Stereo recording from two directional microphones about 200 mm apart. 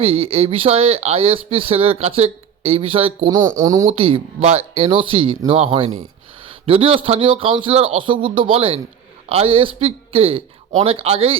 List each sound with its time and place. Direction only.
0.0 s speech: 30° right (ahead or behind)
3.8 s speech: 25° right (ahead or behind)